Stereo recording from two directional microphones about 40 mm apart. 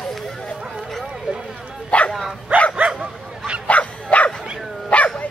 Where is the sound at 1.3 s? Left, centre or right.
Centre.